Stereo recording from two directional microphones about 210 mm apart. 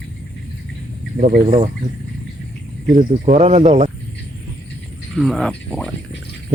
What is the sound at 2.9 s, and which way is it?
Speech, 35° right (ahead or behind).